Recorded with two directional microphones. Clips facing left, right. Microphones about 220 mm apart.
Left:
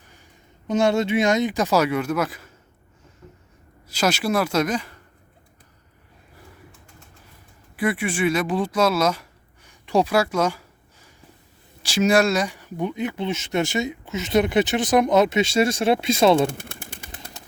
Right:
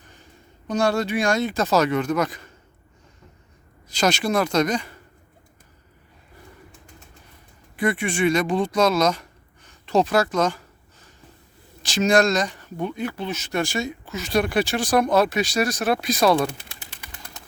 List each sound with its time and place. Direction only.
0.7 s speech: 20° left (ahead or behind); by 2.5 s 5° left (ahead or behind)
3.8 s speech: 5° left (ahead or behind)
7.8 s speech: 5° left (ahead or behind)
9.6 s a sound: 10° left (ahead or behind)
11.8 s speech: 10° left (ahead or behind); by 16.5 s 25° left (ahead or behind)
16.6 s a sound: 50° left (ahead or behind)